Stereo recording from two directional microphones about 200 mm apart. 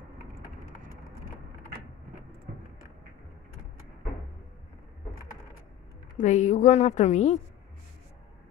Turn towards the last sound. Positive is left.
turn(degrees=35)  # may be behind; listen again after turning